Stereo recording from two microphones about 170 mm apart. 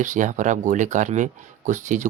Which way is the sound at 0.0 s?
45° right (ahead or behind).